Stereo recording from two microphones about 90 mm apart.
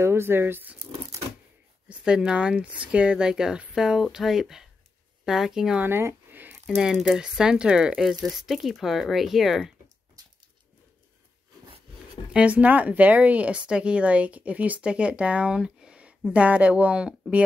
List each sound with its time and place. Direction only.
0.0 s speech: 25° right (ahead or behind)
1.9 s speech: 10° right (ahead or behind)
5.8 s a sound: 25° right (ahead or behind)
6.6 s speech: 5° right (ahead or behind)
12.3 s speech: 15° right (ahead or behind)